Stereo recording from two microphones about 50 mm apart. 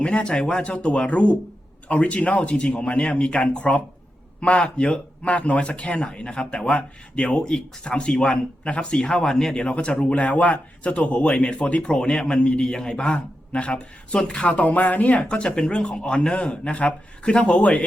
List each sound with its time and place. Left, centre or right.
0.0 s speech: left